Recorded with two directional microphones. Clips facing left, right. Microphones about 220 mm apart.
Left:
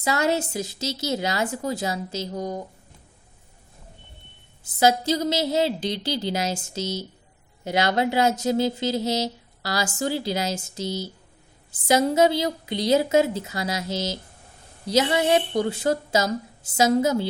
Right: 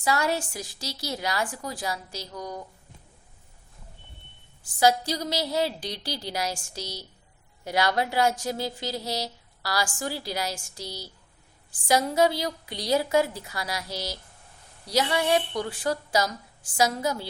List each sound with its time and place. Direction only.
0.0 s speech: 20° left (ahead or behind)
4.6 s speech: 20° left (ahead or behind)